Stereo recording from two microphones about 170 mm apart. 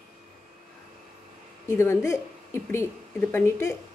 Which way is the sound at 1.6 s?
15° left (ahead or behind).